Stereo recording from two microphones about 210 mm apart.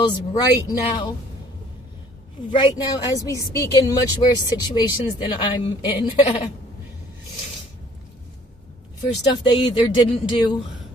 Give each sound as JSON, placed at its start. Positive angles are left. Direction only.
{"t": 0.0, "sound": "a woman's voice", "side_deg": 20}
{"t": 2.6, "sound": "a woman's voice", "side_deg": 20}
{"t": 9.3, "sound": "a woman's voice", "side_deg": 20}